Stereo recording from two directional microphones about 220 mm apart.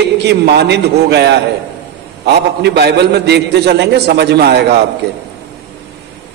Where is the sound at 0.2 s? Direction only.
50° right (ahead or behind).